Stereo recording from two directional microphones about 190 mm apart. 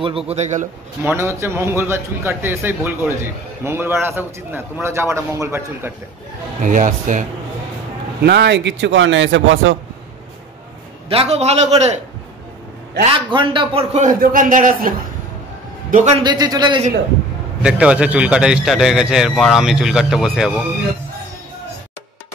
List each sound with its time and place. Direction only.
0.3 s a man's voice: 40° right (ahead or behind)
1.0 s a man's voice: 15° right (ahead or behind)
6.6 s a man's voice: 45° right (ahead or behind)
8.2 s speech: 65° right (ahead or behind); by 9.8 s 90° right
11.1 s a man's voice: 30° right (ahead or behind)
13.3 s a man's voice: 25° right (ahead or behind)
14.0 s a man's voice: 45° right (ahead or behind)
16.2 s a man's voice: 20° right (ahead or behind)
17.6 s a man's voice: 5° right (ahead or behind)